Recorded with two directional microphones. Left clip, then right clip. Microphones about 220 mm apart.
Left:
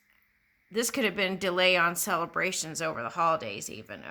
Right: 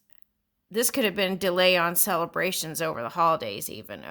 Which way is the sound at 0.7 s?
40° right (ahead or behind).